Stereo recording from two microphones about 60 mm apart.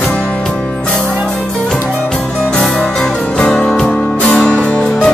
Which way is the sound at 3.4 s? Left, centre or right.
Centre.